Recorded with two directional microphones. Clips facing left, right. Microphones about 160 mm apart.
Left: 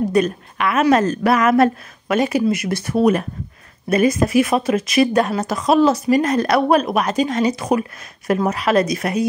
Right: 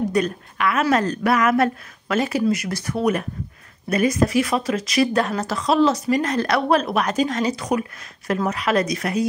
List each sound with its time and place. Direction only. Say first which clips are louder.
0.1 s a woman's voice: left 4 dB; 20° left (ahead or behind)
2.1 s a woman's voice: left 3 dB; 15° left (ahead or behind)
7.5 s a woman's voice: left 4 dB; 30° left (ahead or behind)